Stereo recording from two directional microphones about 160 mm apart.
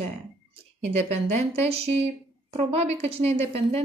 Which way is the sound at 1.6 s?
40° right (ahead or behind).